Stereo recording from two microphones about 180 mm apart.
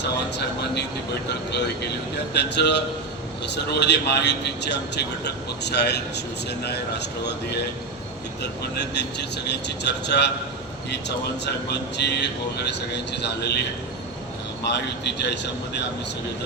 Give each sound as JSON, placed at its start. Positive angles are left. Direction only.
{"t": 0.0, "sound": "a man's voice", "side_deg": 70}
{"t": 11.4, "sound": "a man's voice", "side_deg": 70}
{"t": 14.7, "sound": "a man's voice", "side_deg": 70}